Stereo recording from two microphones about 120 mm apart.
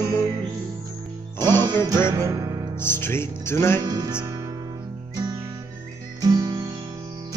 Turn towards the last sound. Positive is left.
turn(degrees=-35)  # may be behind; listen again after turning